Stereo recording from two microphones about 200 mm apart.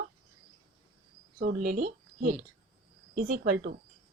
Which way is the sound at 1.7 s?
45° right (ahead or behind).